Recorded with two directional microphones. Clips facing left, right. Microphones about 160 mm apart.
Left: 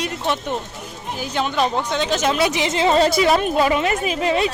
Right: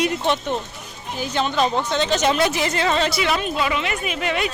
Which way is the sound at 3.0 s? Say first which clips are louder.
Left 6 dB; 40° left (ahead or behind).